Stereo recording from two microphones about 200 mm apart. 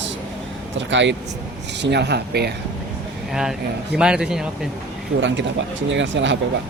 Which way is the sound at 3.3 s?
Centre (ahead or behind).